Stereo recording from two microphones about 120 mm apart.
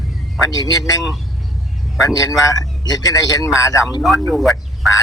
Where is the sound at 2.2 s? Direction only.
30° left (ahead or behind).